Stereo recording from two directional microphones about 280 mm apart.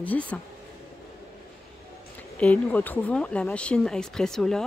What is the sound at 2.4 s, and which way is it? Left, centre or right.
Speech, centre.